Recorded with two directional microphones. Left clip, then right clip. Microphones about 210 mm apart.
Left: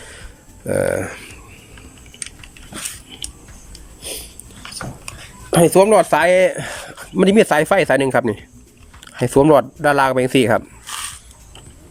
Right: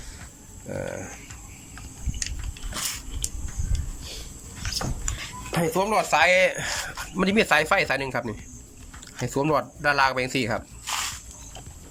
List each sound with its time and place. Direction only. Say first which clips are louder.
0.7 s speech: left 14 dB; 50° left (ahead or behind)
5.5 s speech: left 13 dB; 50° left (ahead or behind)